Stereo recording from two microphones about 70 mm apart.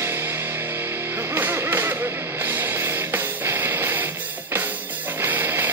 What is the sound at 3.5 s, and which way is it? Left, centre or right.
Music, right.